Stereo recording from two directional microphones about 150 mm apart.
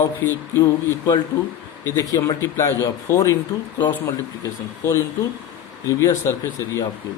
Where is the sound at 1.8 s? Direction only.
20° left (ahead or behind).